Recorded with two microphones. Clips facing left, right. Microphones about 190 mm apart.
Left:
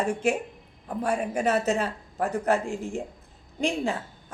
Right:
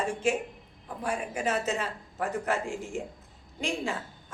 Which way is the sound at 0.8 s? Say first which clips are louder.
Left 6 dB; 40° left (ahead or behind).